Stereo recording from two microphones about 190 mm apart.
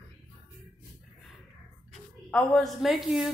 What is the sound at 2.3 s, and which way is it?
A woman's voice, 5° left (ahead or behind).